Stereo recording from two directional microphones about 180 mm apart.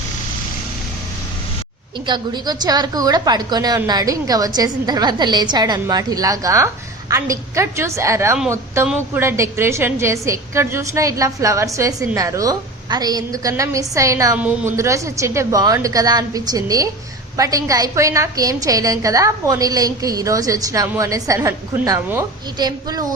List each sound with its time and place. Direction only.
2.0 s a woman's voice: 25° right (ahead or behind)